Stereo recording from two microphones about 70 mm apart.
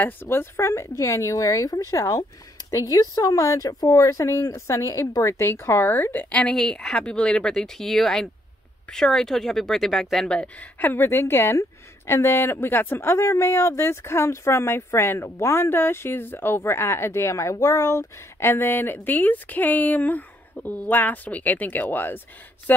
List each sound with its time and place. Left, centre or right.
0.0 s speech: left
6.5 s speech: centre; by 22.8 s left